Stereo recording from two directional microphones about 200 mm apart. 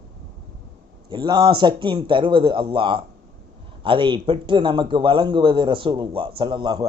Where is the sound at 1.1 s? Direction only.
20° right (ahead or behind).